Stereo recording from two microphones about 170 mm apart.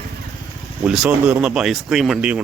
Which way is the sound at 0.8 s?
5° right (ahead or behind).